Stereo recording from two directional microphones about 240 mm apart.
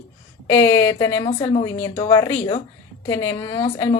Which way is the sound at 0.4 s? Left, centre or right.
Centre.